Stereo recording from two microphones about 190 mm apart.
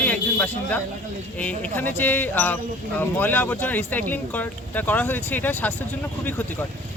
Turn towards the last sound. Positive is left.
turn(degrees=10)  # may be behind; listen again after turning